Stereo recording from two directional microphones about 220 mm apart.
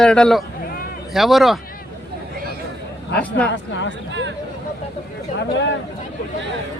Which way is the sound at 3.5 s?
55° left (ahead or behind).